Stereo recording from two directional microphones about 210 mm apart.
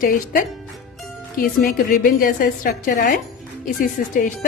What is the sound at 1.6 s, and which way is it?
A woman's voice, 40° left (ahead or behind).